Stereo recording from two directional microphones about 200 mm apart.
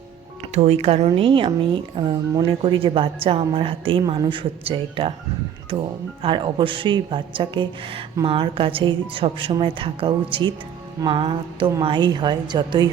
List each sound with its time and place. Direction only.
0.5 s speech: 30° right (ahead or behind)